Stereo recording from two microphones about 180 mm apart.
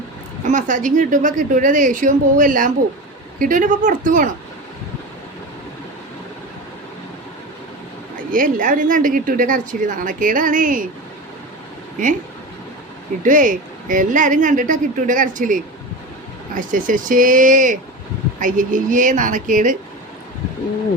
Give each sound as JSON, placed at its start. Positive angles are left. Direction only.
{"t": 0.4, "sound": "a woman's voice", "side_deg": -45}
{"t": 8.1, "sound": "a woman's voice", "side_deg": -50}
{"t": 13.2, "sound": "a woman's voice", "side_deg": -45}